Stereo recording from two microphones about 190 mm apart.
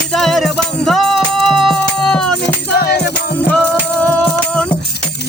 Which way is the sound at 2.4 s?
55° left (ahead or behind).